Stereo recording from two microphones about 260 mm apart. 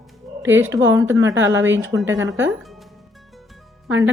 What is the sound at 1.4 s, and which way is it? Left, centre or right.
Speech, right.